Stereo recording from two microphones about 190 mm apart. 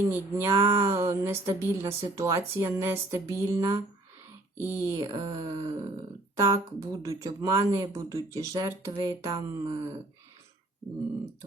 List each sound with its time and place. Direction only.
0.1 s speech: 15° right (ahead or behind)